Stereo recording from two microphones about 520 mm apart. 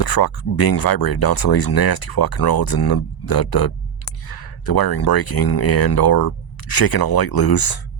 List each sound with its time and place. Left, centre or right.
0.0 s speech: left